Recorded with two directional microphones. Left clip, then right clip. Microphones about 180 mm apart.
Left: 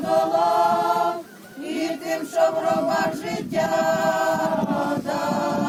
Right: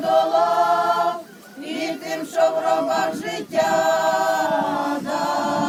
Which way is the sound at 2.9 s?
25° right (ahead or behind).